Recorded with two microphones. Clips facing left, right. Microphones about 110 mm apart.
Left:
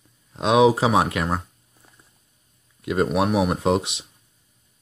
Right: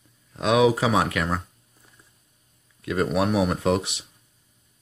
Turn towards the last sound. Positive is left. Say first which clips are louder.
# left 2 dB
turn(degrees=25)  # may be behind; listen again after turning